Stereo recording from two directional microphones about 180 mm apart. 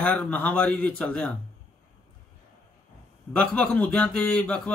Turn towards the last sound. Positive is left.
turn(degrees=5)  # may be behind; listen again after turning